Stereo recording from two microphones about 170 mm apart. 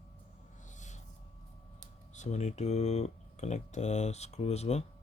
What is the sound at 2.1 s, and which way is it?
Speech, 45° left (ahead or behind).